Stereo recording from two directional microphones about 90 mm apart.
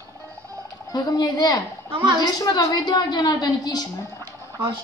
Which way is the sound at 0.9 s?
45° left (ahead or behind).